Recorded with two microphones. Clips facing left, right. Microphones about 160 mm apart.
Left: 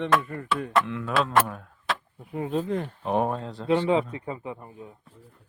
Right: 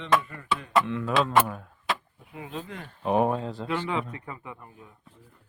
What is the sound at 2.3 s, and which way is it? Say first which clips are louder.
Speech: left 10 dB; 45° left (ahead or behind).